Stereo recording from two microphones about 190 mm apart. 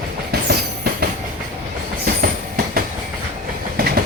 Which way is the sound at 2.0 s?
50° right (ahead or behind).